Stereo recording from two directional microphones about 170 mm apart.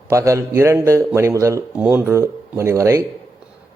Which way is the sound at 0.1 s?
15° right (ahead or behind).